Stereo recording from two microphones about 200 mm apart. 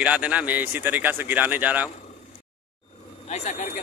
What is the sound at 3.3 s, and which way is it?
Speech, 35° left (ahead or behind).